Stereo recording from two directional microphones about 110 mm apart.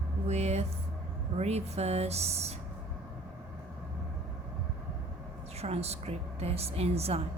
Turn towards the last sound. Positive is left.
turn(degrees=-70)  # may be behind; listen again after turning